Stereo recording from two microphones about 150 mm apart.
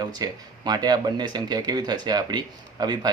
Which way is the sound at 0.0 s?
25° right (ahead or behind).